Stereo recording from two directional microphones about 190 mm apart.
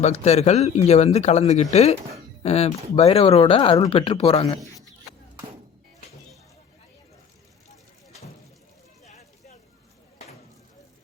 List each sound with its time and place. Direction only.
0.0 s speech: 35° left (ahead or behind)